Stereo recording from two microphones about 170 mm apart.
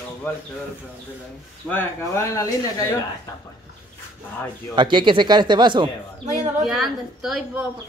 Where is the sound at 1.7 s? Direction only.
15° left (ahead or behind).